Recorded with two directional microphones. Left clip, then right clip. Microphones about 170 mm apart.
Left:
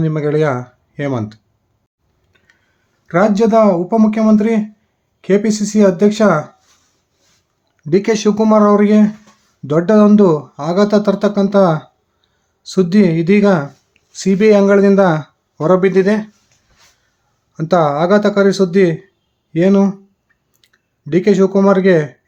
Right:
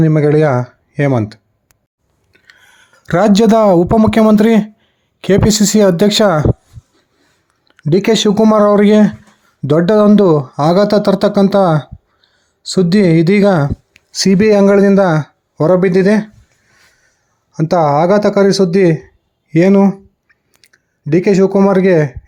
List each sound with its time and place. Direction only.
0.0 s speech: 35° right (ahead or behind)
2.7 s speech: 70° right (ahead or behind)
7.8 s speech: 45° right (ahead or behind)
12.2 s speech: 35° right (ahead or behind)
17.5 s speech: 30° right (ahead or behind)
19.7 s clicking: 25° right (ahead or behind)